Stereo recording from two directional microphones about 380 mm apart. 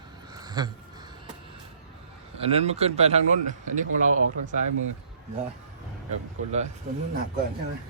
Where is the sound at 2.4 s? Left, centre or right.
Centre.